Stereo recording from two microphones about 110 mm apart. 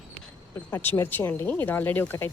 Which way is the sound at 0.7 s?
20° left (ahead or behind).